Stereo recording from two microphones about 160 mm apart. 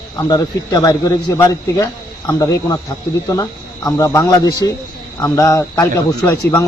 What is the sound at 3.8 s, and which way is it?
Speech, 20° left (ahead or behind).